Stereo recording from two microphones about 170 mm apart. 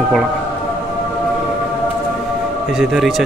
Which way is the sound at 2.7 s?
Centre (ahead or behind).